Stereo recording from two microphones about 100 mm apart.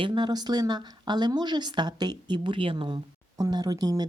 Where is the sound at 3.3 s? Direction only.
40° right (ahead or behind).